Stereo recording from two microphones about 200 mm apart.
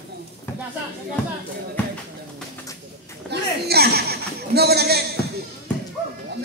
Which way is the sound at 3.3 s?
55° right (ahead or behind).